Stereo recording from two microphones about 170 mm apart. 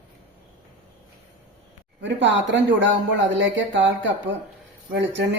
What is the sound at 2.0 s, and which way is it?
A man's voice, 90° right.